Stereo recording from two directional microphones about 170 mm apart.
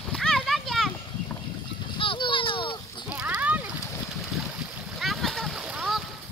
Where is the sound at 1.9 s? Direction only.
30° left (ahead or behind).